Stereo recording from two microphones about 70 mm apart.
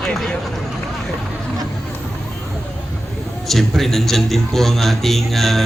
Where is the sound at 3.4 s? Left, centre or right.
Centre.